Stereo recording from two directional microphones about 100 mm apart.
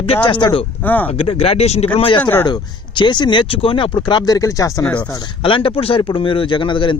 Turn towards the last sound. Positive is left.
turn(degrees=55)  # may be behind; listen again after turning